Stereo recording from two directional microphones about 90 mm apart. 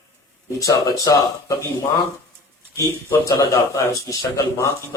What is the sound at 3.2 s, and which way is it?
A man's voice, 45° left (ahead or behind).